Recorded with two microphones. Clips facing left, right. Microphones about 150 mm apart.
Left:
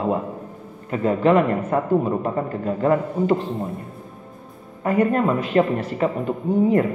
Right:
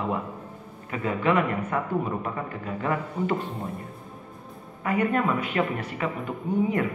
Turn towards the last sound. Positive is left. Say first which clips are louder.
# left 7 dB
turn(degrees=30)  # may be behind; listen again after turning